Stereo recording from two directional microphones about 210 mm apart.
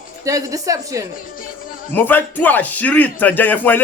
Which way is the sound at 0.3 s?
15° right (ahead or behind).